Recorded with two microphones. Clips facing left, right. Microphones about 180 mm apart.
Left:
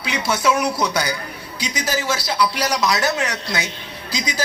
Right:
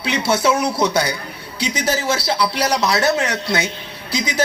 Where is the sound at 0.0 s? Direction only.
30° right (ahead or behind).